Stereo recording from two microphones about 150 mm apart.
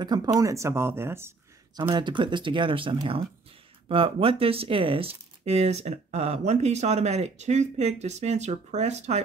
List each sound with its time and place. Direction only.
0.0 s speech: 25° right (ahead or behind)
1.8 s speech: 30° right (ahead or behind); by 9.2 s 50° right (ahead or behind)